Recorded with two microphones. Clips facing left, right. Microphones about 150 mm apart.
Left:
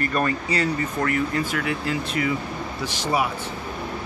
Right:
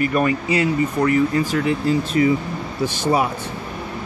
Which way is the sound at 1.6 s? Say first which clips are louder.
Right 7 dB; 30° right (ahead or behind).